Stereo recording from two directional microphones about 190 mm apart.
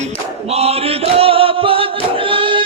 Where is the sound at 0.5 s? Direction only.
30° right (ahead or behind).